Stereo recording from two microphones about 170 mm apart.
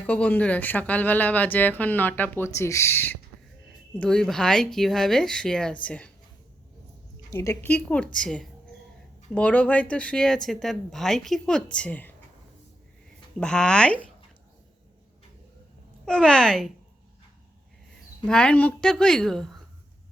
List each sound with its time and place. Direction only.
0.0 s speech: 10° left (ahead or behind)
7.3 s speech: 15° left (ahead or behind)
13.4 s speech: 5° left (ahead or behind)
16.0 s speech: 5° left (ahead or behind)
18.3 s speech: 5° left (ahead or behind)